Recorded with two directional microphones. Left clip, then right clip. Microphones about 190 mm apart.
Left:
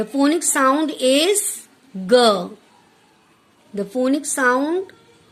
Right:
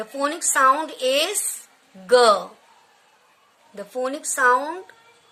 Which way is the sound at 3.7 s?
20° left (ahead or behind).